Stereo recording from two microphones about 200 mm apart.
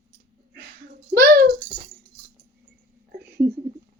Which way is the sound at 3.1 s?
50° right (ahead or behind).